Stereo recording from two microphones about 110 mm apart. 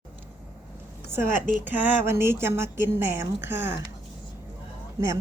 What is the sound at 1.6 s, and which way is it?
Speech, 15° right (ahead or behind).